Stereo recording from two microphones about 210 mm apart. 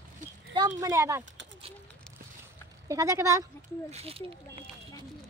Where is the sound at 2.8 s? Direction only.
15° right (ahead or behind).